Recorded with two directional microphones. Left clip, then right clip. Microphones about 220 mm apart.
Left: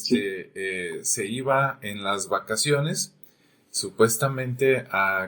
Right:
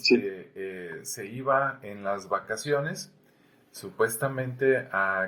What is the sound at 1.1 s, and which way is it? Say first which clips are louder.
Speech: left 2 dB; 20° left (ahead or behind).